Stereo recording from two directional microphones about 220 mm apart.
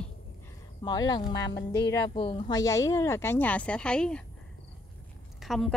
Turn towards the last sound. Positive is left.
turn(degrees=0)  # may be behind; listen again after turning